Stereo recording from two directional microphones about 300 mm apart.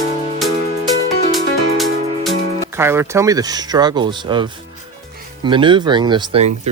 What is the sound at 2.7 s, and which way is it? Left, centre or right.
Speech, centre.